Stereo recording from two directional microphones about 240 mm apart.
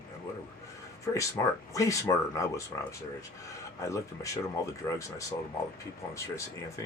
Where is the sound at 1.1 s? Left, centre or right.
Centre.